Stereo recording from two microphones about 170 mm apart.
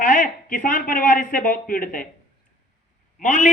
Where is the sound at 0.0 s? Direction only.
50° left (ahead or behind).